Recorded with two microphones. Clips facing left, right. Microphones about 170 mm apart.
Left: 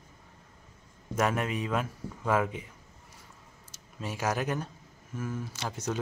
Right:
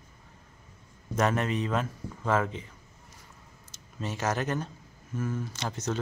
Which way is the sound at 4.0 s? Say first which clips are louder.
Right 1 dB; 10° left (ahead or behind).